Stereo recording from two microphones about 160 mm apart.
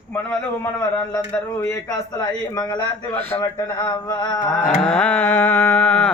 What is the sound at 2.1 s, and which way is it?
Speech, 25° left (ahead or behind).